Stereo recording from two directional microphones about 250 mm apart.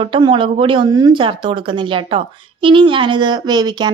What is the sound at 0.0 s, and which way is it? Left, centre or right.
Speech, centre.